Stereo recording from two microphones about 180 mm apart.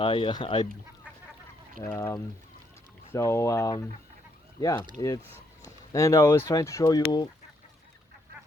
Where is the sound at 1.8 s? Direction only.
15° left (ahead or behind).